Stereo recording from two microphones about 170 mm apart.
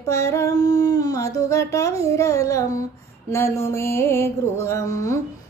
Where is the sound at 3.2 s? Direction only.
15° left (ahead or behind).